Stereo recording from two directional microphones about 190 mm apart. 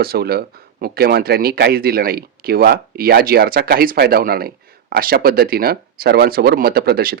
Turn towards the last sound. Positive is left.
turn(degrees=-55)  # may be behind; listen again after turning